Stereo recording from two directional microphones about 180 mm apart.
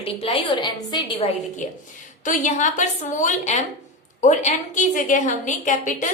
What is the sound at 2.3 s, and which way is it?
A woman's voice, 45° left (ahead or behind).